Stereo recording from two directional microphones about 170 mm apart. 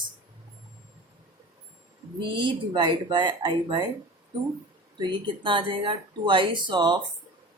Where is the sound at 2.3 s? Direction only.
30° right (ahead or behind).